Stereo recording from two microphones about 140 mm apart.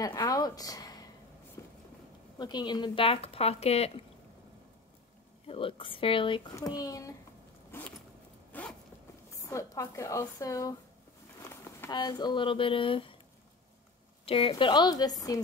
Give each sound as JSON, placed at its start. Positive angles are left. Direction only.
{"t": 0.0, "sound": "a woman's voice", "side_deg": 25}
{"t": 1.6, "sound": "a sound", "side_deg": 20}
{"t": 2.3, "sound": "speech", "side_deg": 30}
{"t": 5.5, "sound": "speech", "side_deg": 40}
{"t": 6.5, "sound": "speech", "side_deg": 25}
{"t": 7.7, "sound": "zipper", "side_deg": 15}
{"t": 9.3, "sound": "speech", "side_deg": 20}
{"t": 11.4, "sound": "a sound", "side_deg": 20}
{"t": 11.9, "sound": "speech", "side_deg": 30}
{"t": 14.2, "sound": "speech", "side_deg": 40}